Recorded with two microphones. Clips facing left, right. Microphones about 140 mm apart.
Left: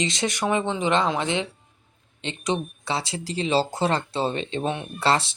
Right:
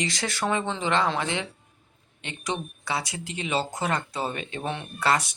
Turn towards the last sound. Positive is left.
turn(degrees=30)  # may be behind; listen again after turning